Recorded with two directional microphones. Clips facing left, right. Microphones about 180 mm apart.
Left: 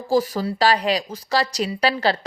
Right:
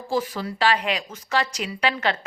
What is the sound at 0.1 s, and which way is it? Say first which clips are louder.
Speech: left 6 dB; 40° left (ahead or behind).